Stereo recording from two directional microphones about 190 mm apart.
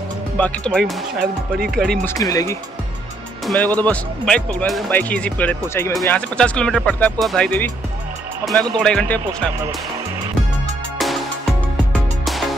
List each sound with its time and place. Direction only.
0.4 s speech: 5° left (ahead or behind)
2.1 s speech: 20° left (ahead or behind)
11.0 s music: centre (ahead or behind)